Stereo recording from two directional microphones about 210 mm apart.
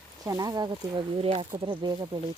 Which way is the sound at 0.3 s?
15° right (ahead or behind).